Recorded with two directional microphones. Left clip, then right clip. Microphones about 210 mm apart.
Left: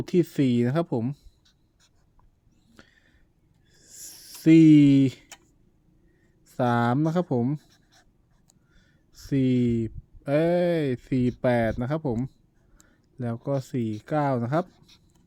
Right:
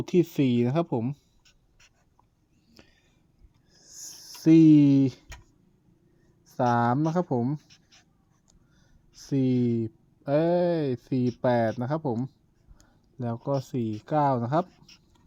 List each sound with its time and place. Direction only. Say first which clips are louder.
0.0 s speech: even; 15° left (ahead or behind)
2.7 s a sound: left 2 dB; 15° left (ahead or behind)
3.7 s snoring: right 2 dB; 45° left (ahead or behind)
4.1 s speech: left 1 dB; 25° left (ahead or behind)
6.5 s speech: even; 20° left (ahead or behind)
9.2 s speech: left 2 dB; 20° left (ahead or behind)